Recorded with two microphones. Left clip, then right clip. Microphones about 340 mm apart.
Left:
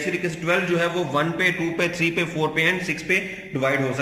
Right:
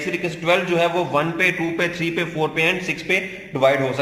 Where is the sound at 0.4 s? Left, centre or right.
Centre.